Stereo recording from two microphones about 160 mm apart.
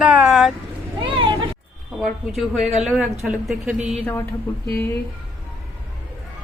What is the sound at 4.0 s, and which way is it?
Speech, 15° left (ahead or behind).